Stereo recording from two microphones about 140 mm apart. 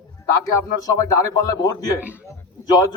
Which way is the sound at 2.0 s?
10° right (ahead or behind).